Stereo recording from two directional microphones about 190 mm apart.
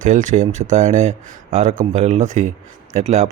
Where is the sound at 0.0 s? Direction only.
40° right (ahead or behind).